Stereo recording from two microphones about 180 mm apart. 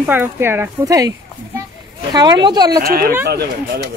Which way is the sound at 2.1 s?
25° right (ahead or behind).